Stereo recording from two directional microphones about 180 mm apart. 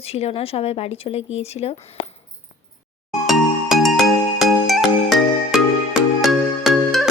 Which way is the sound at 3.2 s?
Centre (ahead or behind).